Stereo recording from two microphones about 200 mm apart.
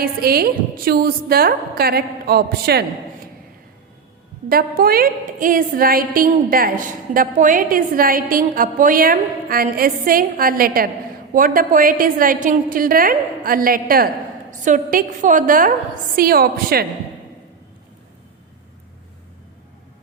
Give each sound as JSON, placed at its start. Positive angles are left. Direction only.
{"t": 0.0, "sound": "a woman's voice", "side_deg": -50}
{"t": 4.4, "sound": "a woman's voice", "side_deg": -50}